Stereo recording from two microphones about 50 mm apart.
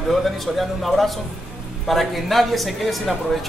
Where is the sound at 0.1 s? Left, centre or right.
Centre.